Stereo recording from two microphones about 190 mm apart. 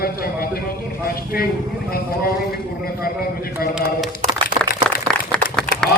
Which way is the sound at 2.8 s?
50° left (ahead or behind).